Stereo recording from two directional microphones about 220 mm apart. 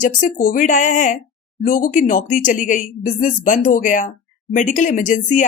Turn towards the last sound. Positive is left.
turn(degrees=35)  # may be behind; listen again after turning